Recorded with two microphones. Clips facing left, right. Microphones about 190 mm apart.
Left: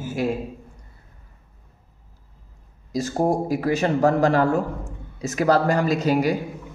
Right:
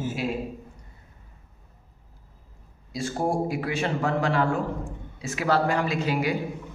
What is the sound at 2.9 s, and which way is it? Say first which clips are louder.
A man's voice: left 5 dB; 40° left (ahead or behind).